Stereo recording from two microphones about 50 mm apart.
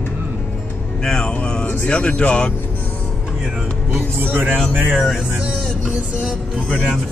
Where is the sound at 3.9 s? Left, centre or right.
Right.